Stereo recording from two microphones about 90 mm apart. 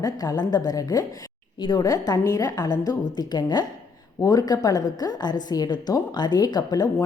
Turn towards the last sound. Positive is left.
turn(degrees=45)  # may be behind; listen again after turning